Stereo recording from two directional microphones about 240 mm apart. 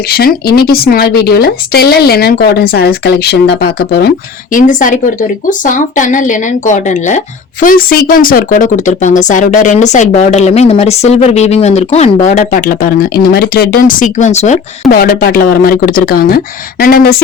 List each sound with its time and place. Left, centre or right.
0.1 s speech: left